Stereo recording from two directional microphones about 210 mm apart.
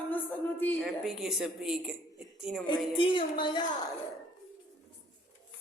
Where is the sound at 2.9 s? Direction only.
25° left (ahead or behind).